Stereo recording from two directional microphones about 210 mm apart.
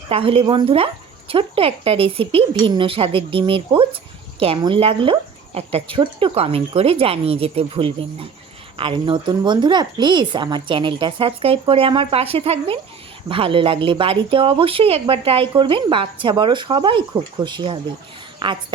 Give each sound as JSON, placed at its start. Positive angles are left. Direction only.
{"t": 0.1, "sound": "speech", "side_deg": -25}